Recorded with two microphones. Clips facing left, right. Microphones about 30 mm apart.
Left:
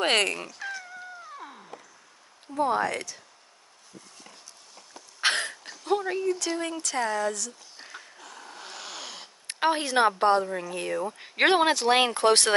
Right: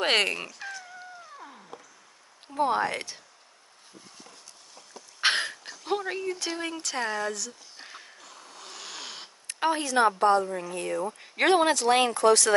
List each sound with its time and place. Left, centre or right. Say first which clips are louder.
0.0 s speech: even; centre
2.5 s speech: even; centre
5.2 s a sound: right 1 dB; centre
5.9 s speech: left 4 dB; centre
8.6 s dog: left 1 dB; centre
9.0 s snoring: even; centre
9.6 s a woman's voice: left 1 dB; left
10.4 s speech: left 1 dB; centre
12.1 s speech: even; left